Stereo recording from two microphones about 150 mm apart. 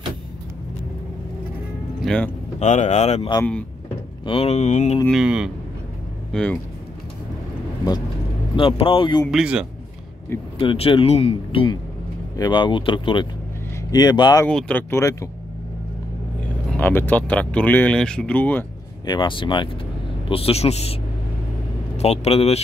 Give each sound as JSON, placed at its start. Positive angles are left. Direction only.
{"t": 2.0, "sound": "vehicle", "side_deg": 5}
{"t": 2.6, "sound": "speech", "side_deg": 55}
{"t": 4.3, "sound": "speech", "side_deg": 40}
{"t": 5.0, "sound": "speech", "side_deg": -5}
{"t": 6.3, "sound": "speech", "side_deg": 5}
{"t": 8.5, "sound": "speech", "side_deg": 35}
{"t": 9.3, "sound": "speech", "side_deg": -5}
{"t": 10.6, "sound": "speech", "side_deg": 35}
{"t": 14.5, "sound": "speech", "side_deg": 5}
{"t": 16.7, "sound": "speech", "side_deg": 10}
{"t": 19.0, "sound": "speech", "side_deg": 30}